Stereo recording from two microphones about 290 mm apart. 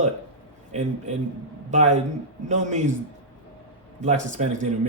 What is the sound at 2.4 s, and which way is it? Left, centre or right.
Speech, right.